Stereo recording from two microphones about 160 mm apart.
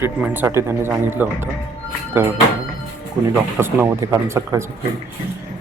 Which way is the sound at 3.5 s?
10° right (ahead or behind).